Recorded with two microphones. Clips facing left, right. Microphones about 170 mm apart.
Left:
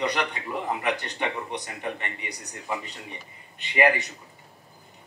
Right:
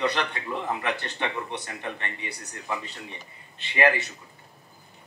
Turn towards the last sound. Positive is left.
turn(degrees=15)  # may be behind; listen again after turning